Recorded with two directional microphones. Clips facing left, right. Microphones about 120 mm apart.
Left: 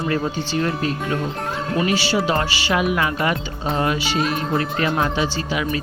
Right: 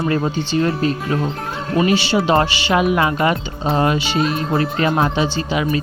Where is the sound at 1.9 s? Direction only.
25° right (ahead or behind).